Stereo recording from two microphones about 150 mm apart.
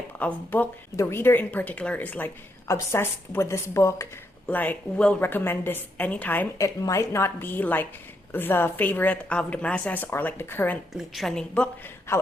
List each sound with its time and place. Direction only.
0.2 s speech: 10° left (ahead or behind)
10.9 s a woman's voice: centre (ahead or behind)
12.1 s a man's voice: 20° left (ahead or behind)